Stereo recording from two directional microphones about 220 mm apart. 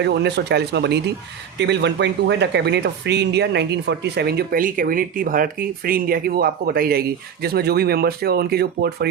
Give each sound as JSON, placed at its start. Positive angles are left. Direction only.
{"t": 0.0, "sound": "speech", "side_deg": -50}